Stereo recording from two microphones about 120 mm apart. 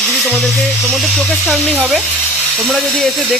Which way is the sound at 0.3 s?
Centre (ahead or behind).